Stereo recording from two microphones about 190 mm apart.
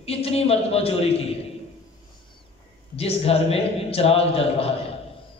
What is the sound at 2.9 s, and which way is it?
A man's voice, 30° left (ahead or behind).